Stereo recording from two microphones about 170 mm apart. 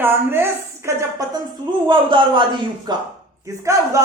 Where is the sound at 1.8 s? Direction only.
30° right (ahead or behind).